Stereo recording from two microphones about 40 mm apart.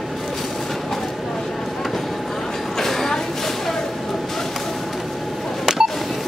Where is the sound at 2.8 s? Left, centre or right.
Centre.